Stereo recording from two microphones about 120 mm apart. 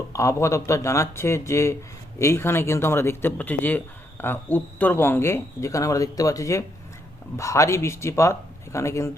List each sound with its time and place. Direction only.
0.1 s speech: 25° left (ahead or behind)